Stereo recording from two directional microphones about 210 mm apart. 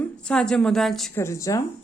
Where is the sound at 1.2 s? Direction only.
15° left (ahead or behind).